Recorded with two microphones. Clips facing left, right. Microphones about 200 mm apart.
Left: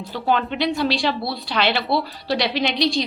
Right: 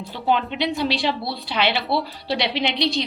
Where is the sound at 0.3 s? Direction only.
15° right (ahead or behind).